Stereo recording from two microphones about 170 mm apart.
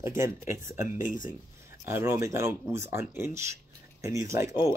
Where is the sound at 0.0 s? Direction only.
15° right (ahead or behind).